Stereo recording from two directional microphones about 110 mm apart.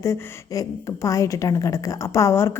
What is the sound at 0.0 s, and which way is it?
A woman's voice, 30° left (ahead or behind).